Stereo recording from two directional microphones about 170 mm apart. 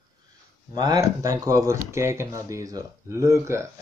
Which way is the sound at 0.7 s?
20° right (ahead or behind).